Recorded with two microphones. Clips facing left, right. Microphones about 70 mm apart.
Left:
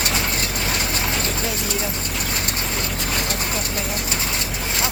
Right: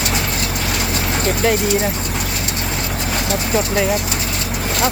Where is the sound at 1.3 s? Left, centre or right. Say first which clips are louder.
Right 9 dB; right.